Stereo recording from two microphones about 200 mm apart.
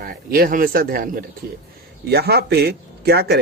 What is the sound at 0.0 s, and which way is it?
A man's voice, 45° right (ahead or behind).